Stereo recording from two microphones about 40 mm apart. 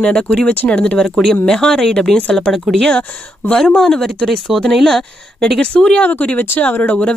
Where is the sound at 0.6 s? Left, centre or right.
Left.